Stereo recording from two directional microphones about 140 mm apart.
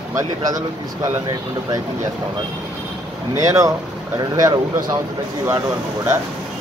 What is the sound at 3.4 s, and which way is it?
Speech, 25° right (ahead or behind).